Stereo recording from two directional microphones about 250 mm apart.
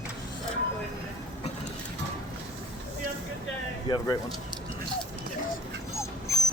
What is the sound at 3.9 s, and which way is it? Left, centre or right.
Speech, centre.